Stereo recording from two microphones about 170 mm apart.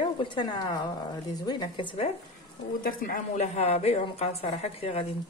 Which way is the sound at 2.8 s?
55° left (ahead or behind).